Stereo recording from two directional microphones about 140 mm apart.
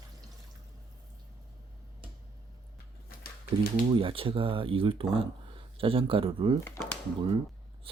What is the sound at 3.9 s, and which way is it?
Speech, 40° right (ahead or behind).